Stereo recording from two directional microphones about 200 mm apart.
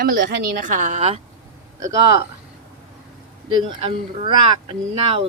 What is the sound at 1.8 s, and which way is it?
Speech, 15° right (ahead or behind).